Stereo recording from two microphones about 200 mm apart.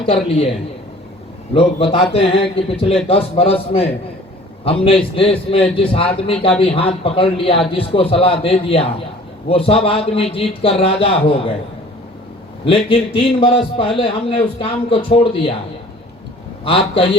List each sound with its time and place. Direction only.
0.0 s a man's voice: 30° left (ahead or behind)
1.5 s a man's voice: 30° left (ahead or behind)
12.6 s a man's voice: 25° left (ahead or behind)
16.6 s a man's voice: 25° left (ahead or behind)